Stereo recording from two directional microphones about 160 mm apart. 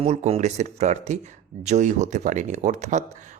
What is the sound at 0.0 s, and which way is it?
Speech, 45° right (ahead or behind).